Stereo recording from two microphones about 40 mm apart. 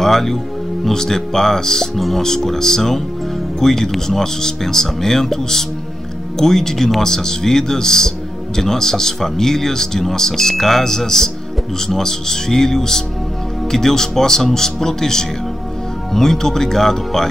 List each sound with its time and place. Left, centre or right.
0.0 s speech: centre